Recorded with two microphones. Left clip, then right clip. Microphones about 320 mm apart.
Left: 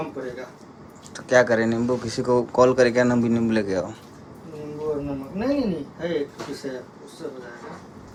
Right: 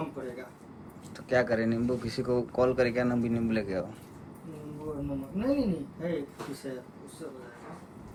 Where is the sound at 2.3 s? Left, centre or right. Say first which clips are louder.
Left 9 dB; left.